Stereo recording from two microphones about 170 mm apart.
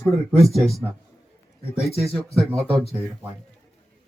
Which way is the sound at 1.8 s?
Centre (ahead or behind).